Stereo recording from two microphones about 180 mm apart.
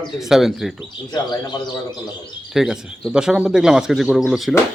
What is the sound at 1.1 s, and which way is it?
Speech, 25° left (ahead or behind).